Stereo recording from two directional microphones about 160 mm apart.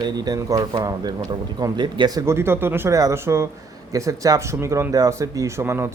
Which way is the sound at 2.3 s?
15° right (ahead or behind).